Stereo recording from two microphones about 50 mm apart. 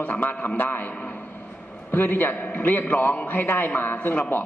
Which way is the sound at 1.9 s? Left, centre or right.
Left.